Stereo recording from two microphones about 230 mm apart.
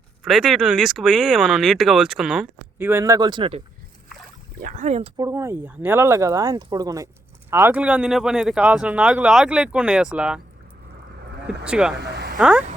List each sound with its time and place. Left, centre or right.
0.3 s speech: centre; by 3.6 s right
4.6 s speech: right
5.1 s speech: centre
11.6 s speech: centre
11.9 s speech: right
12.4 s speech: centre